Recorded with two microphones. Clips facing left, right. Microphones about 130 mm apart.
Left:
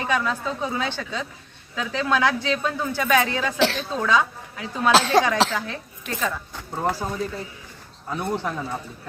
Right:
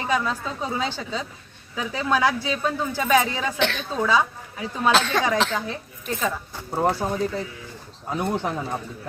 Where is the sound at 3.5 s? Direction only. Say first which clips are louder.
Left 5 dB; 35° left (ahead or behind).